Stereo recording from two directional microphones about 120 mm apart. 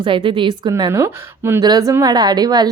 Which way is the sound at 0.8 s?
25° right (ahead or behind).